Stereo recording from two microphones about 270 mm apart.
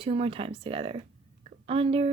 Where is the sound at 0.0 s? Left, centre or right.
Right.